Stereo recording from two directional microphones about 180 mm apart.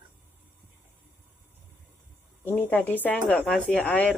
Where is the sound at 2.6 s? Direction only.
10° left (ahead or behind).